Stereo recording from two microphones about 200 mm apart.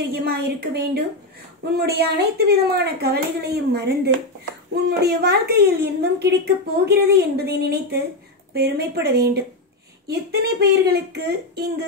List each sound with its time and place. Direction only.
0.1 s a woman's voice: 50° right (ahead or behind)